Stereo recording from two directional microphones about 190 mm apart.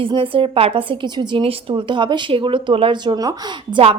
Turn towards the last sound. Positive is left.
turn(degrees=-20)  # may be behind; listen again after turning